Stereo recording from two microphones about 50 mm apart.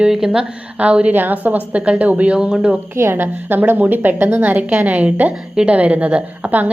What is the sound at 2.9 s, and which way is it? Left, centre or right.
A woman's voice, right.